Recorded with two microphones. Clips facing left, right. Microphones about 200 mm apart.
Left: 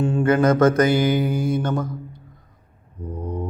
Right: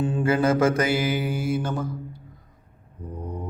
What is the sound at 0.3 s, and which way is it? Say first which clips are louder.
Mantra: left 3 dB; 30° right (ahead or behind).